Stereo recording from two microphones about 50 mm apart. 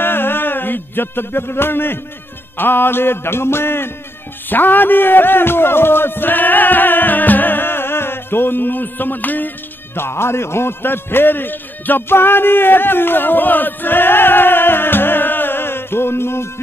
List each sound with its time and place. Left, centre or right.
0.0 s music: left
4.5 s a man's voice: left
9.9 s a man's voice: left